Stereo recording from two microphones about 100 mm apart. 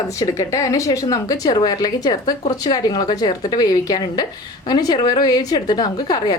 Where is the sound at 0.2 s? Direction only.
35° left (ahead or behind).